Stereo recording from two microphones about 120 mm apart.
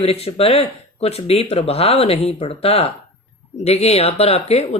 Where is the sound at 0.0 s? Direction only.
55° left (ahead or behind).